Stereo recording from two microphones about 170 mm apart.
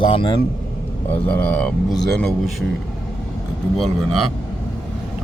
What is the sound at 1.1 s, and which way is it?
Speech, 10° left (ahead or behind).